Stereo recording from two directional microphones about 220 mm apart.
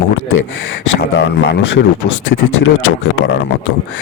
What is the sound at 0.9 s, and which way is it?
Speech, 50° left (ahead or behind).